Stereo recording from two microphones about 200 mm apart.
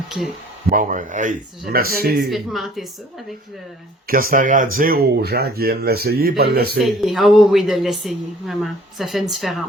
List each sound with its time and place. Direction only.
0.7 s speech: 40° right (ahead or behind)
2.2 s a woman's voice: centre (ahead or behind)
4.1 s speech: 45° right (ahead or behind)
6.7 s a woman's voice: centre (ahead or behind)